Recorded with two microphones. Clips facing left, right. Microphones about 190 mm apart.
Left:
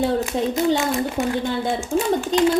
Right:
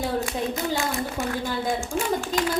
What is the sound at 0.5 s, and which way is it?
A woman's voice, 25° left (ahead or behind).